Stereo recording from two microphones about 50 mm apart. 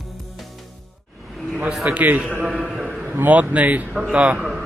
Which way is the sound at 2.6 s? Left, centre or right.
Centre.